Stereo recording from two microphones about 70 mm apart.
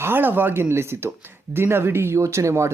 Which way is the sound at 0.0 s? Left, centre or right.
Right.